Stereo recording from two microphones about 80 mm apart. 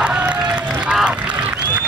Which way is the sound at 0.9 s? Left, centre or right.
Centre.